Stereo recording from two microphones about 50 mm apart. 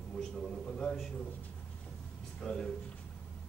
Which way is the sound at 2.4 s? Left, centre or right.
Centre.